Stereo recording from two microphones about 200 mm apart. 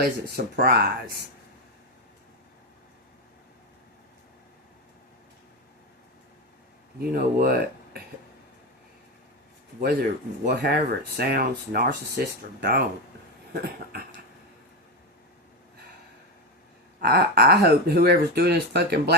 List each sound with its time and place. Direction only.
0.0 s speech: 50° right (ahead or behind)
7.1 s speech: 45° right (ahead or behind)
9.8 s speech: 50° right (ahead or behind)
17.0 s speech: 50° right (ahead or behind)